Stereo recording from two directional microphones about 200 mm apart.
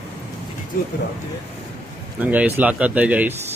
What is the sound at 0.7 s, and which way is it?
Speech, 45° left (ahead or behind).